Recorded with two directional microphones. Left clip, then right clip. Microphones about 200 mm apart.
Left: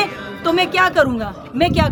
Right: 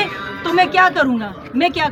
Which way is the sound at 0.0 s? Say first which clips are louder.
Left 1 dB; 20° left (ahead or behind).